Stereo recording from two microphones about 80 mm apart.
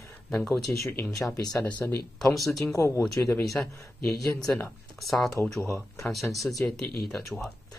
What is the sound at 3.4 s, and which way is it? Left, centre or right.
Speech, centre.